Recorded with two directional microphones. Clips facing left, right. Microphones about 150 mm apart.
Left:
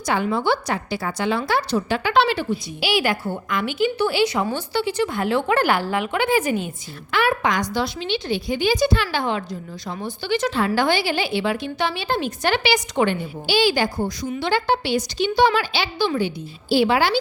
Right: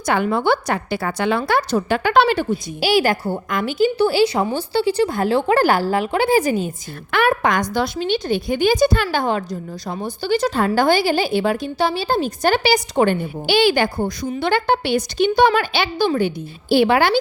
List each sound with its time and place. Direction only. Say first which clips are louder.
0.0 s a woman's voice: right 3 dB; 55° right (ahead or behind); by 6.7 s 35° right (ahead or behind)
7.1 s a woman's voice: right 3 dB; 50° right (ahead or behind)
13.5 s a woman's voice: right 3 dB; 60° right (ahead or behind)